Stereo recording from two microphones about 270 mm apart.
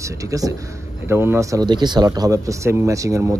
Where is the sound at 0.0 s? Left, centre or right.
Centre.